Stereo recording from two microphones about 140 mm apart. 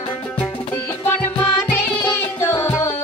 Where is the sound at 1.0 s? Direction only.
10° left (ahead or behind).